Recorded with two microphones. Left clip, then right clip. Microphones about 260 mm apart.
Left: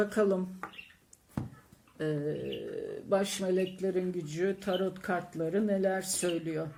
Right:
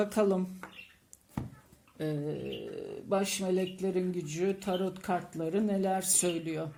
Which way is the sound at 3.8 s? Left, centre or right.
Right.